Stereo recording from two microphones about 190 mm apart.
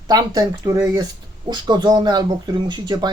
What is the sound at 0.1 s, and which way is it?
Speech, 20° right (ahead or behind).